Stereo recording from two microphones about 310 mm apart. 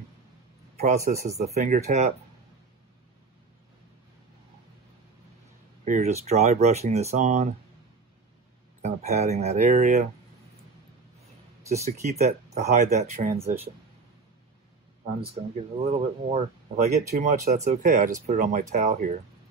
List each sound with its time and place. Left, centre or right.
0.7 s speech: right
5.9 s speech: right
8.8 s speech: right
11.7 s speech: right
15.5 s speech: centre